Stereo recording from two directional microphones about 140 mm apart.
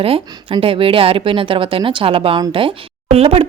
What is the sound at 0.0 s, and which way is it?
Speech, 40° right (ahead or behind).